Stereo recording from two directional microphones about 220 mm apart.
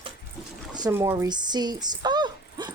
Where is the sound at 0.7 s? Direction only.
15° right (ahead or behind).